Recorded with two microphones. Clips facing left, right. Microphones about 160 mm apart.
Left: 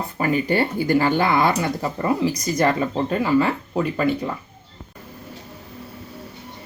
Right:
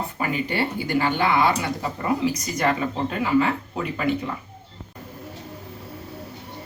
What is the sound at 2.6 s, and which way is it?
Speech, 40° left (ahead or behind).